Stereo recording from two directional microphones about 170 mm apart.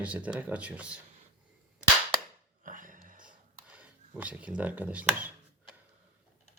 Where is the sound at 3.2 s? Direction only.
5° right (ahead or behind).